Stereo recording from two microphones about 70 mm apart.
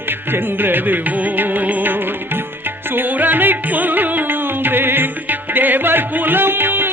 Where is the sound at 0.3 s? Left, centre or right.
Right.